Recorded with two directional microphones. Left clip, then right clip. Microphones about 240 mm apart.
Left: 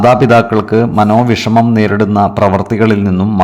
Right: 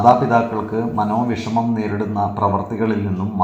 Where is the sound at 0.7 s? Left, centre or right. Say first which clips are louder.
Left 10 dB; left.